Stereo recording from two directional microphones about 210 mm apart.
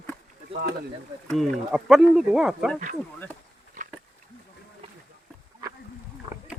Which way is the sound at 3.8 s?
35° right (ahead or behind).